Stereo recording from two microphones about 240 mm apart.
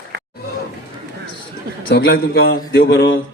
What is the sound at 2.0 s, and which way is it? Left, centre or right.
Speech, left.